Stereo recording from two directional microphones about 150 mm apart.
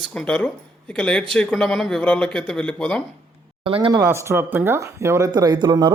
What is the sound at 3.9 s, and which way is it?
Speech, 20° right (ahead or behind).